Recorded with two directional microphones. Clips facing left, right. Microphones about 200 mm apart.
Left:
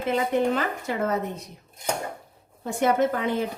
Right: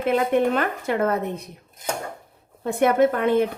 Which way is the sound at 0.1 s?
60° right (ahead or behind).